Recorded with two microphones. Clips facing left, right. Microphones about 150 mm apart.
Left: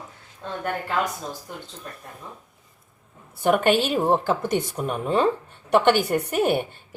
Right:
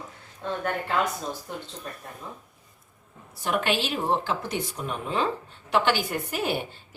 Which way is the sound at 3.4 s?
50° left (ahead or behind).